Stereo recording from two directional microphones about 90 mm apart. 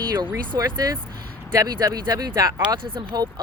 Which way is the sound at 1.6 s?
45° right (ahead or behind).